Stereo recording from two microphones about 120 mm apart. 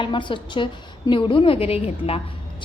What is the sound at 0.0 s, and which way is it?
A woman's voice, 40° left (ahead or behind).